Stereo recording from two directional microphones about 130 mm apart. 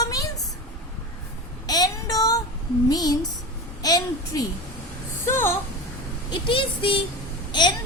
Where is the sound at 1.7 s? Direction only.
30° left (ahead or behind).